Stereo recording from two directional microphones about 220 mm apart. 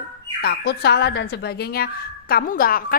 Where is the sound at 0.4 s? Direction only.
45° left (ahead or behind).